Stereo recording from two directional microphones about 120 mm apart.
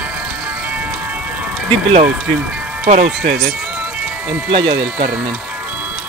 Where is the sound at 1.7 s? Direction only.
45° right (ahead or behind).